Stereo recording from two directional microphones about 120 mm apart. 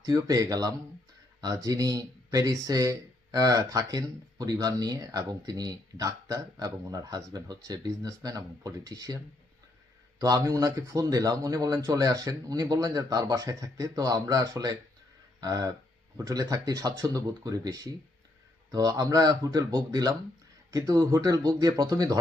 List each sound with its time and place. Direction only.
0.0 s speech: 30° right (ahead or behind)
10.2 s a man's voice: 30° right (ahead or behind)